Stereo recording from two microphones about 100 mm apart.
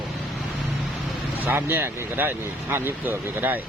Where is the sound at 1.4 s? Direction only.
20° right (ahead or behind).